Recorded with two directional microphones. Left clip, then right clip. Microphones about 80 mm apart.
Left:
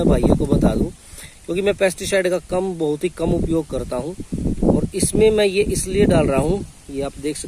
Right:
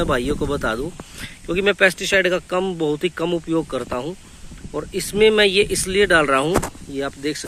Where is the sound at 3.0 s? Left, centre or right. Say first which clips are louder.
Left 1 dB; left.